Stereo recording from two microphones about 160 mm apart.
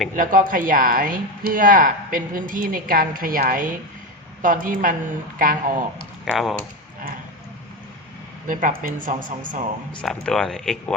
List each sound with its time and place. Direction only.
0.2 s speech: 60° right (ahead or behind)
6.3 s speech: centre (ahead or behind)
8.4 s speech: 55° right (ahead or behind)
10.0 s speech: 5° left (ahead or behind)